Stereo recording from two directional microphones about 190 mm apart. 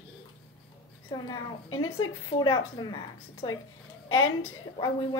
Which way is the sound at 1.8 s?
25° left (ahead or behind).